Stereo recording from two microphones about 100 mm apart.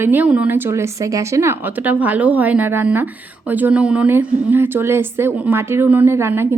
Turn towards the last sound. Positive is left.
turn(degrees=-25)  # may be behind; listen again after turning